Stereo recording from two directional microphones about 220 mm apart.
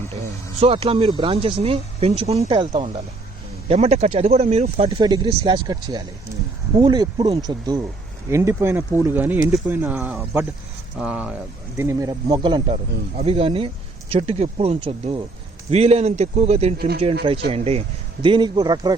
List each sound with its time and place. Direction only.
0.6 s speech: 25° right (ahead or behind)
16.7 s speech: 45° right (ahead or behind)
17.5 s speech: 25° right (ahead or behind)